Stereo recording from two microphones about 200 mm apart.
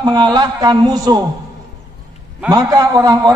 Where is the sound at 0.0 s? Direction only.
20° right (ahead or behind).